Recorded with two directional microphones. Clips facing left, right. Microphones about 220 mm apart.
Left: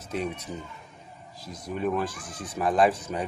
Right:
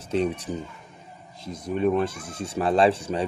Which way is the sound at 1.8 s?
25° right (ahead or behind).